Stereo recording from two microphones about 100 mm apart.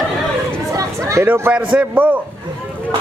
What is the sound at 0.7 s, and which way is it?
Chatter, 35° right (ahead or behind).